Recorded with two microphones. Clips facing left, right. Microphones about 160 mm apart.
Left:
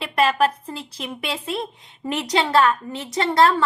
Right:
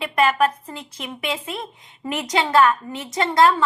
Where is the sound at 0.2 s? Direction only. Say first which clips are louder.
Even; 35° left (ahead or behind).